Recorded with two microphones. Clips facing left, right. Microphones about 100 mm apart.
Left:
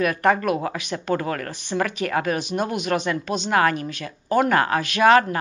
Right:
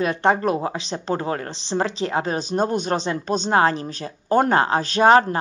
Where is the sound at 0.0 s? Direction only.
25° right (ahead or behind).